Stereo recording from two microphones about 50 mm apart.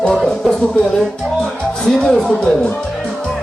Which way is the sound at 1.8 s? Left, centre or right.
Centre.